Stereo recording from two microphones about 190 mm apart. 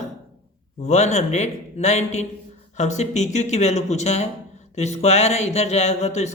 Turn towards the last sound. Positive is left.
turn(degrees=35)  # may be behind; listen again after turning